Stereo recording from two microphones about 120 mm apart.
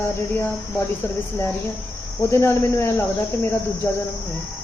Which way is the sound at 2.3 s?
20° left (ahead or behind).